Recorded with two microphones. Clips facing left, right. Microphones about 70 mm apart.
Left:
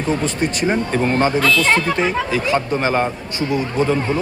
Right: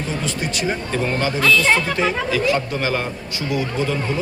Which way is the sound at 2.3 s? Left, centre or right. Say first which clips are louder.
Left 1 dB; left.